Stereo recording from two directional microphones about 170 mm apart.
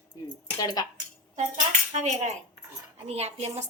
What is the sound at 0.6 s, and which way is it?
Speech, 20° left (ahead or behind).